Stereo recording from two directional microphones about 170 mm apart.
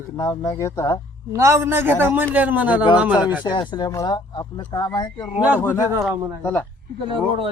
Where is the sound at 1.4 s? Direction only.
15° right (ahead or behind).